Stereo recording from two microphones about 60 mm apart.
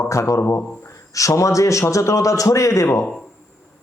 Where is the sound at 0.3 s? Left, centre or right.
Left.